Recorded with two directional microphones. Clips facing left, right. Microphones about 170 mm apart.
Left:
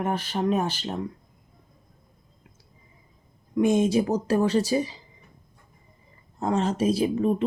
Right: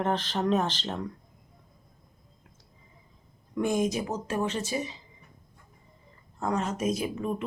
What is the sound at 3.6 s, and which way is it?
Speech, 25° left (ahead or behind).